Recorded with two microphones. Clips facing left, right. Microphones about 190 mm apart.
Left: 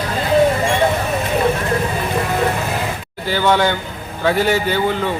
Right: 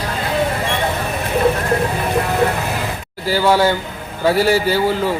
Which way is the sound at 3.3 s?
5° right (ahead or behind).